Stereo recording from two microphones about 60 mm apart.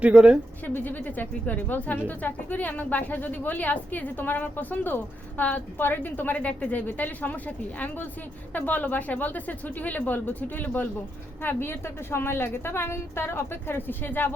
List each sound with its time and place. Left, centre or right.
0.0 s speech: centre
0.6 s a woman's voice: left
6.3 s a woman's voice: centre